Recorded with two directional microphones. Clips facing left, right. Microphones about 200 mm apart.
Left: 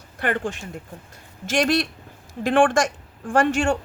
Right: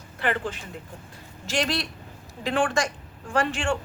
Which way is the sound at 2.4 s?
50° left (ahead or behind).